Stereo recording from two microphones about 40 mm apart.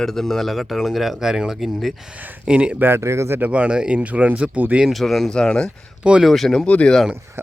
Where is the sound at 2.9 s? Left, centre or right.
Right.